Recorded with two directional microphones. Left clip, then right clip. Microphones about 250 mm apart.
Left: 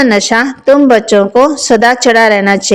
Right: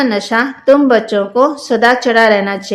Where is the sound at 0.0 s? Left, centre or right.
Left.